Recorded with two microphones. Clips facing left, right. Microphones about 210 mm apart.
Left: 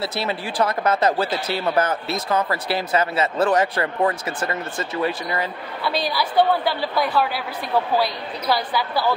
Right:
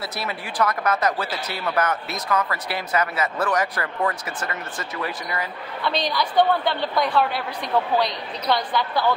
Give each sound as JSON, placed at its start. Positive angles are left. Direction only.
{"t": 0.0, "sound": "speech", "side_deg": 25}
{"t": 5.9, "sound": "a woman's voice", "side_deg": 5}